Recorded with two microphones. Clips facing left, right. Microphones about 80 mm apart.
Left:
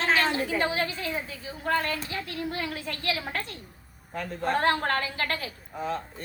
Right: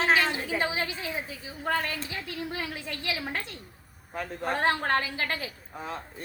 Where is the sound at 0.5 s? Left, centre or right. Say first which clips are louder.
Left 2 dB; centre.